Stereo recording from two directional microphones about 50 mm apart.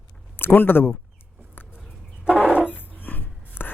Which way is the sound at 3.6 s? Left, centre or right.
Left.